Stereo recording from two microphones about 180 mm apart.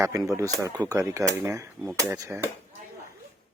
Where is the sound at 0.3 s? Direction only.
20° right (ahead or behind).